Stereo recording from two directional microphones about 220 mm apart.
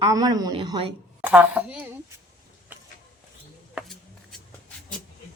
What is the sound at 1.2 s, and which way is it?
Speech, 5° right (ahead or behind).